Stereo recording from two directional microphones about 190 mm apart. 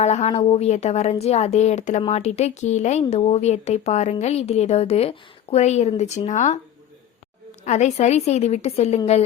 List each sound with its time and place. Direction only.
0.0 s a woman's voice: 35° left (ahead or behind)
7.6 s a woman's voice: 35° left (ahead or behind)